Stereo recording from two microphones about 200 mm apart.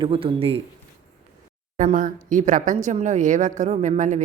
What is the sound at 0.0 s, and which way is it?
Speech, 25° right (ahead or behind).